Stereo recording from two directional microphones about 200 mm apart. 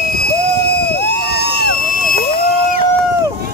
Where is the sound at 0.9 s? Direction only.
55° left (ahead or behind).